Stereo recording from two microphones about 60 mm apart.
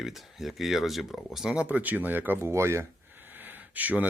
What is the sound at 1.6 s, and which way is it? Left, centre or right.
Speech, right.